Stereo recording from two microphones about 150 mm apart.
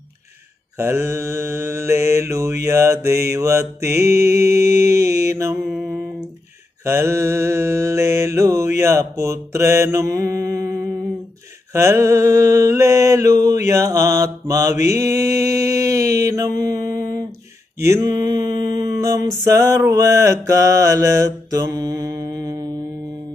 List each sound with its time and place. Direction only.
0.8 s mantra: 15° right (ahead or behind)
6.8 s mantra: 20° right (ahead or behind)